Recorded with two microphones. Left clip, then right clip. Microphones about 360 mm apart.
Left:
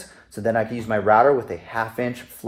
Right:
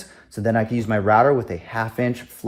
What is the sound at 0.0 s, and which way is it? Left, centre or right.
Speech, centre.